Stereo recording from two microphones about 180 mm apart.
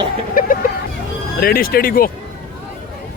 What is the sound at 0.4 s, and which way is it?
Vehicle, 50° left (ahead or behind).